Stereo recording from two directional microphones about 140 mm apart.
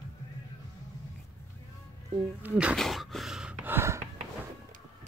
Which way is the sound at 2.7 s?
Centre (ahead or behind).